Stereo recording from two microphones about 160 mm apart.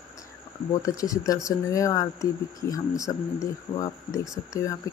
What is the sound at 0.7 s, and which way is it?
Speech, 20° left (ahead or behind).